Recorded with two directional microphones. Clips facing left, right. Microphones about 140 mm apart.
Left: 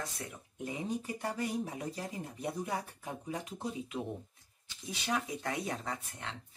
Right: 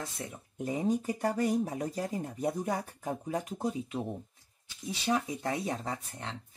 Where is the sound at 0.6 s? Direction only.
40° right (ahead or behind).